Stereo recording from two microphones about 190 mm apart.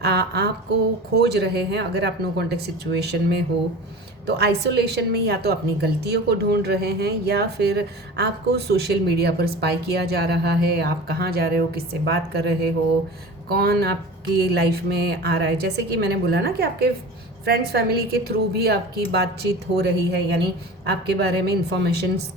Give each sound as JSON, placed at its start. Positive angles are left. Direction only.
{"t": 0.0, "sound": "a woman's voice", "side_deg": -60}